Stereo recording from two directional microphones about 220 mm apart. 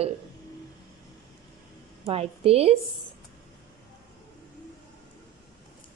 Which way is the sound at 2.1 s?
25° right (ahead or behind).